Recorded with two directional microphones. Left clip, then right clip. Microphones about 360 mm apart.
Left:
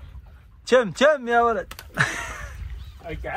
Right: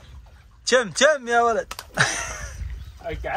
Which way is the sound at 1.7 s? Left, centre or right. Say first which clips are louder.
Right 2 dB; centre.